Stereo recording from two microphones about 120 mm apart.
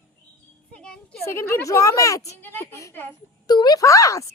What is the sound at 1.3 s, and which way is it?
A woman's voice, 20° left (ahead or behind).